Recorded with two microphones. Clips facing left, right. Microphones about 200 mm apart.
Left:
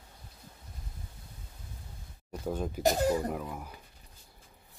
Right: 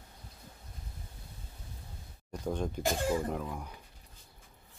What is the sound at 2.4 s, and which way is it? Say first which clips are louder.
Speech: even; 5° left (ahead or behind).